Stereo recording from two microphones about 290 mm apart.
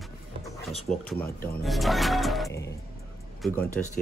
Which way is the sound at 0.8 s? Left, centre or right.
Centre.